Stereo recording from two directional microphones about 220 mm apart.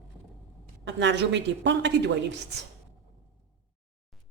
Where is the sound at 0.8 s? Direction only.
50° right (ahead or behind).